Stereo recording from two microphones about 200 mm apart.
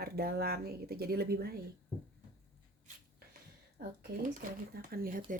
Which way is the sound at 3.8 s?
45° right (ahead or behind).